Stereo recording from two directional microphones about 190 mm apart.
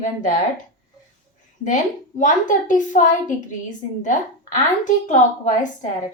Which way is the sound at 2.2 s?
40° left (ahead or behind).